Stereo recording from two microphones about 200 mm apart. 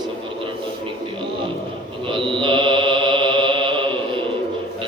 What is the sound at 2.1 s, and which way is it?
Mantra, 25° right (ahead or behind).